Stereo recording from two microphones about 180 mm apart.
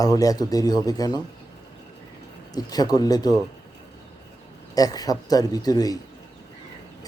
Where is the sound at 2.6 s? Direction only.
20° left (ahead or behind).